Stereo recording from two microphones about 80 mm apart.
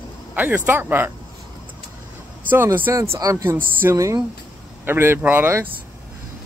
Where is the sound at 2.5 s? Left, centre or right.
Right.